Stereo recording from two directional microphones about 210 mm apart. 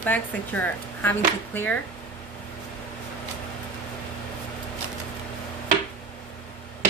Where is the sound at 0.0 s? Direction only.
10° left (ahead or behind).